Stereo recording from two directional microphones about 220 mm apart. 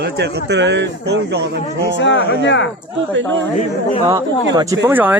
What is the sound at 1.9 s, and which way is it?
Speech, 55° left (ahead or behind).